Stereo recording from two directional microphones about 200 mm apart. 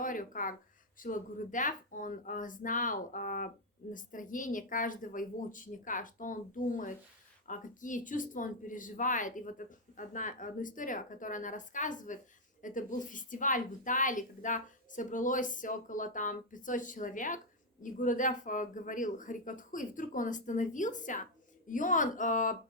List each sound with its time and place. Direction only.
0.0 s speech: 40° left (ahead or behind)